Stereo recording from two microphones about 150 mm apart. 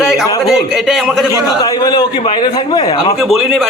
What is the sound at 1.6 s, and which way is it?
A man's voice, 25° left (ahead or behind).